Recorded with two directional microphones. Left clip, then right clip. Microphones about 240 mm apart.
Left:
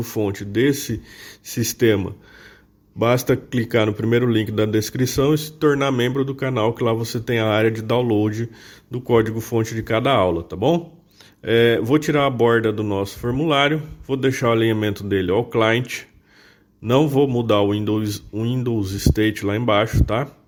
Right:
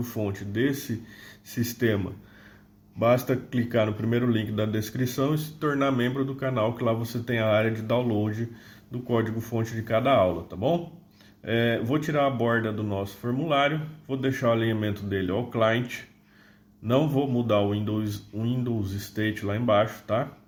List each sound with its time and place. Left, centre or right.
0.0 s speech: left
3.0 s speech: left